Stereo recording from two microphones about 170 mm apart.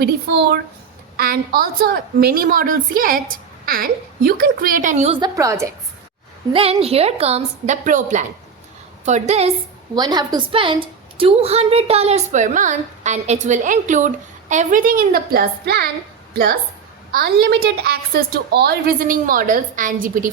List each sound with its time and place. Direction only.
1.1 s a woman's voice: 60° right (ahead or behind); by 5.1 s 45° right (ahead or behind)
5.2 s a woman's voice: 20° right (ahead or behind)
6.5 s a woman's voice: 35° right (ahead or behind)
9.9 s a woman's voice: 25° right (ahead or behind); by 15.9 s 70° right (ahead or behind)
17.1 s a woman's voice: 65° right (ahead or behind)